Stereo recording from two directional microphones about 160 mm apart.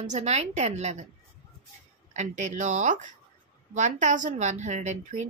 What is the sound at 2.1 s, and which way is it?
A woman's voice, 50° right (ahead or behind).